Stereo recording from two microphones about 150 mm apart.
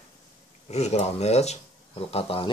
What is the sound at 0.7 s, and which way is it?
A man's voice, 45° left (ahead or behind).